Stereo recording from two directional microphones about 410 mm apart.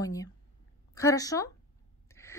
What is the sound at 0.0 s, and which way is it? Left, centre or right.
A woman's voice, centre.